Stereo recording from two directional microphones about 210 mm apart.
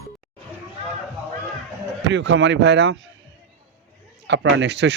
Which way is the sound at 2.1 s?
60° right (ahead or behind).